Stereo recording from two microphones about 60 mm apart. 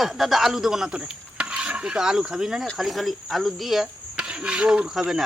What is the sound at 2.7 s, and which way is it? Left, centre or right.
Speech, centre.